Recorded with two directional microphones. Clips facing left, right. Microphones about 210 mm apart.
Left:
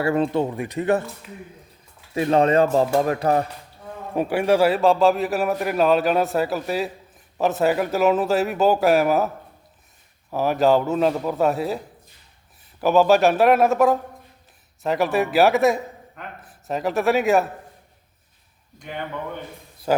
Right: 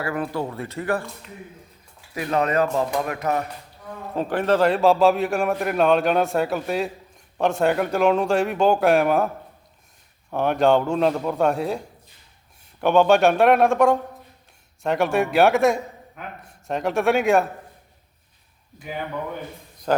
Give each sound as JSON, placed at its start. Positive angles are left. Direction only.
{"t": 0.0, "sound": "speech", "side_deg": 25}
{"t": 1.2, "sound": "a man's voice", "side_deg": 5}
{"t": 2.1, "sound": "speech", "side_deg": 30}
{"t": 4.1, "sound": "a man's voice", "side_deg": 10}
{"t": 18.8, "sound": "a man's voice", "side_deg": -5}
{"t": 19.9, "sound": "speech", "side_deg": 5}